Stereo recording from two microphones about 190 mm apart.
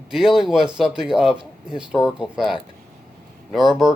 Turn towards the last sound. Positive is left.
turn(degrees=0)  # may be behind; listen again after turning